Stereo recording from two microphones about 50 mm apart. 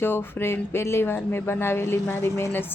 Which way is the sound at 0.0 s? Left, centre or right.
Left.